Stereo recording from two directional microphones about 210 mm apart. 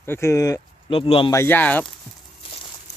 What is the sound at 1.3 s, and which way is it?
Speech, 10° left (ahead or behind).